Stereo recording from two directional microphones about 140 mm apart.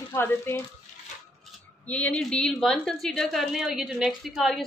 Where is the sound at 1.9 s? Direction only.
10° left (ahead or behind).